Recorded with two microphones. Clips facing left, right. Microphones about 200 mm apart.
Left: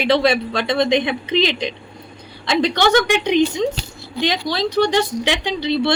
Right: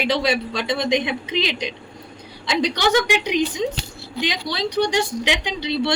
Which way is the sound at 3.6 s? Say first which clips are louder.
Left 3 dB; 70° left (ahead or behind).